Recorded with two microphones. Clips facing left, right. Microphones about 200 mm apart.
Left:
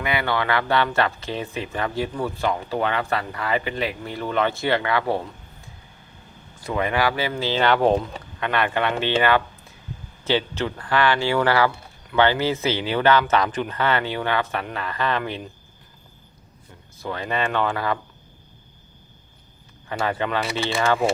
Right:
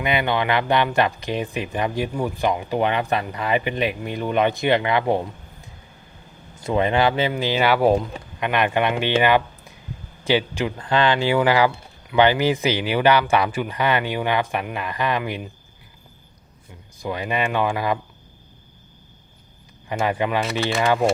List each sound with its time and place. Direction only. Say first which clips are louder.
0.0 s speech: right 2 dB; 20° right (ahead or behind)
6.6 s speech: right 4 dB; 25° right (ahead or behind)
17.0 s speech: right 2 dB; 15° right (ahead or behind)
19.9 s speech: right 2 dB; 15° right (ahead or behind)